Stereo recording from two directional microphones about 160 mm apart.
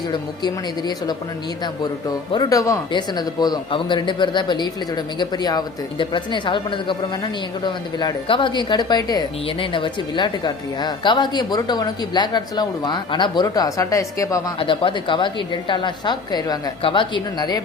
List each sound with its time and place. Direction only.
0.1 s speech: 25° left (ahead or behind)
14.6 s a woman's voice: 35° left (ahead or behind)